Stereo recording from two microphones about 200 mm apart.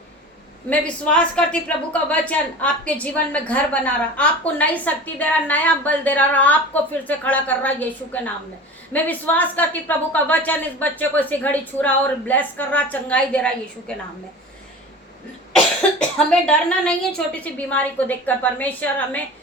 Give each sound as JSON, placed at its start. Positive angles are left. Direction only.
{"t": 0.7, "sound": "a woman's voice", "side_deg": 5}
{"t": 15.5, "sound": "cough", "side_deg": 5}
{"t": 17.2, "sound": "a woman's voice", "side_deg": 5}